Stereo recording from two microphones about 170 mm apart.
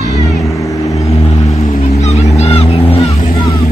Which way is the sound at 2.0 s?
40° left (ahead or behind).